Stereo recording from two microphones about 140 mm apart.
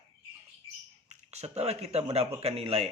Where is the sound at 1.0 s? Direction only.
50° right (ahead or behind).